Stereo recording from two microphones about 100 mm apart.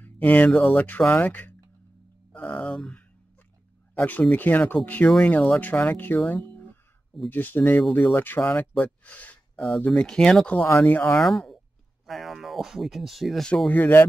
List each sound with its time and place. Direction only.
0.0 s speech: 15° left (ahead or behind)
8.7 s a sound: 15° left (ahead or behind)
9.8 s speech: 15° left (ahead or behind); by 13.5 s centre (ahead or behind)
13.7 s speech: 20° left (ahead or behind)